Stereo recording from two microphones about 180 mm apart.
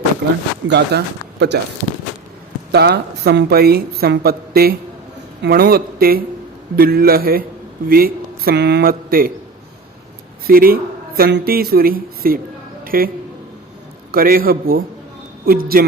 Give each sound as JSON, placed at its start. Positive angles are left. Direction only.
{"t": 0.2, "sound": "speech", "side_deg": -60}
{"t": 2.7, "sound": "a man's voice", "side_deg": -65}
{"t": 10.4, "sound": "speech", "side_deg": -55}
{"t": 12.8, "sound": "a sound", "side_deg": -50}
{"t": 14.1, "sound": "a man's voice", "side_deg": -55}